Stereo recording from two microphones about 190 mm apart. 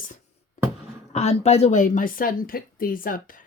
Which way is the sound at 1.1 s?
35° left (ahead or behind).